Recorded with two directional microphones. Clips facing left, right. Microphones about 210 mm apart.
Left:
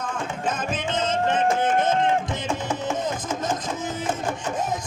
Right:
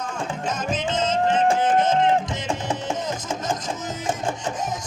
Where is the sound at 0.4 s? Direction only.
55° left (ahead or behind).